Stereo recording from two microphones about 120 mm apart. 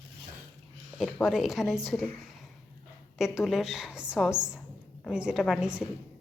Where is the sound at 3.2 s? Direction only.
5° right (ahead or behind).